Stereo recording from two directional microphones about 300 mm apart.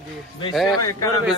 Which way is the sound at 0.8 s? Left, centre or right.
Centre.